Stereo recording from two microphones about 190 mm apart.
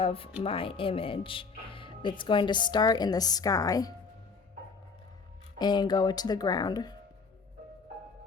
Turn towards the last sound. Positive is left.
turn(degrees=20)  # may be behind; listen again after turning